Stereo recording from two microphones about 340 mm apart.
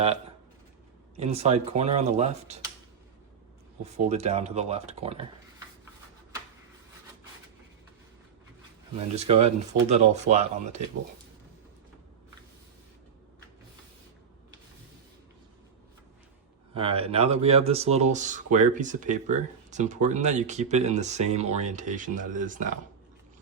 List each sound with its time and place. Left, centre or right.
1.1 s speech: centre
3.8 s speech: centre
9.0 s speech: centre
16.7 s speech: centre